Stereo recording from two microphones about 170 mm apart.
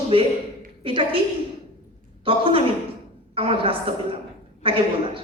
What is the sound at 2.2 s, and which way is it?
A woman's voice, 30° right (ahead or behind).